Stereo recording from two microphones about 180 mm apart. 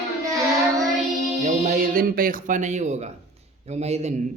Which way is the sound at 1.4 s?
50° right (ahead or behind).